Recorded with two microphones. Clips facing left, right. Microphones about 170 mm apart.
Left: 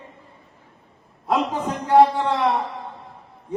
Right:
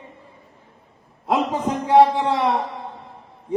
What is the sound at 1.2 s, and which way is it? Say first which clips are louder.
A man's voice: right 1 dB; 25° right (ahead or behind).